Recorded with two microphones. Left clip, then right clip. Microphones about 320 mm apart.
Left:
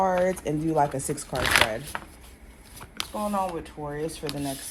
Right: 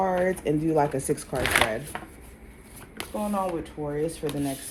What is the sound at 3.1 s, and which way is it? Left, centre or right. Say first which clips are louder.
Speech: even; left.